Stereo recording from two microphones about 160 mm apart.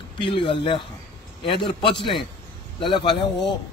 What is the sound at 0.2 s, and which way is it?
Speech, 30° left (ahead or behind).